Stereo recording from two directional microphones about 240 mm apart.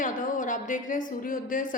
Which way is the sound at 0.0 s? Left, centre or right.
Left.